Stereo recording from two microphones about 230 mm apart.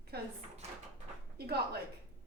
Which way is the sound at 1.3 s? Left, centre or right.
Right.